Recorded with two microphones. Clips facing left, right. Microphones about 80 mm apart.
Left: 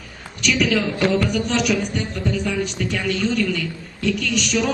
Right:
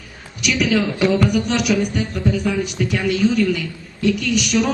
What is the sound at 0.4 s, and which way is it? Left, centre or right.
A man's voice, centre.